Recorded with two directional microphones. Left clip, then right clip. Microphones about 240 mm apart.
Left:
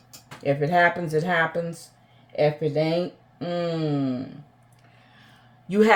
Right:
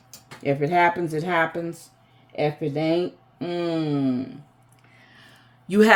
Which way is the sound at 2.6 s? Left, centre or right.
Right.